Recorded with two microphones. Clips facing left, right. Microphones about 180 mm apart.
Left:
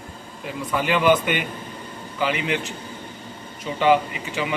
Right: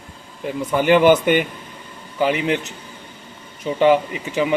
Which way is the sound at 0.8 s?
50° right (ahead or behind).